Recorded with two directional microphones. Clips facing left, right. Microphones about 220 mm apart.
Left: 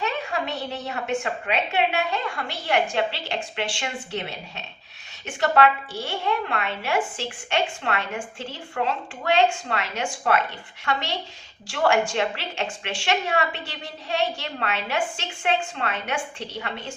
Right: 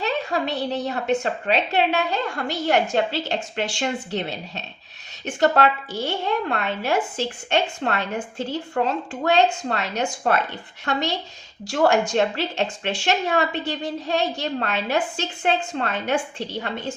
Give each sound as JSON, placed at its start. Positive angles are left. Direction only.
{"t": 0.0, "sound": "a woman's voice", "side_deg": -35}
{"t": 11.7, "sound": "a woman's voice", "side_deg": -40}